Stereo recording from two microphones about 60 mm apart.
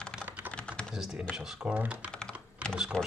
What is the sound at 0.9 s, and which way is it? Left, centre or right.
Speech, centre.